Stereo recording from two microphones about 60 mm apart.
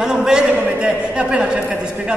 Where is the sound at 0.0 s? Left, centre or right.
Centre.